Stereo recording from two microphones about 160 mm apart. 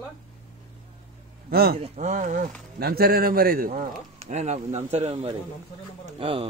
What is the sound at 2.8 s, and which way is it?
A man's voice, 75° right (ahead or behind).